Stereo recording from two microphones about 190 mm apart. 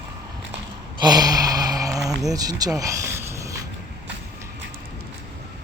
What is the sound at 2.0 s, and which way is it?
Speech, 20° right (ahead or behind).